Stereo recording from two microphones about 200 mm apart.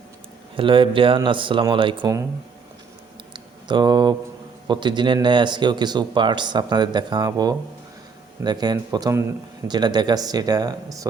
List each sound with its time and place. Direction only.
0.5 s speech: 25° right (ahead or behind)
3.3 s a sound: 20° right (ahead or behind)
4.7 s speech: 25° right (ahead or behind)